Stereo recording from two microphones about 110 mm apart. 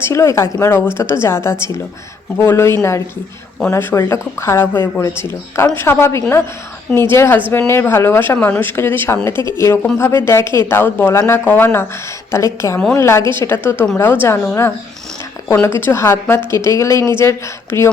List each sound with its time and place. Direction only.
0.0 s speech: 25° left (ahead or behind)
15.6 s speech: 20° left (ahead or behind)